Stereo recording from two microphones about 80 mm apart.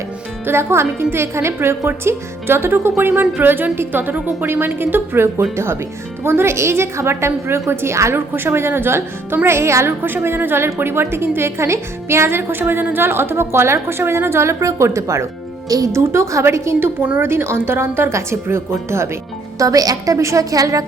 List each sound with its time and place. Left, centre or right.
0.4 s a woman's voice: right
19.5 s a woman's voice: right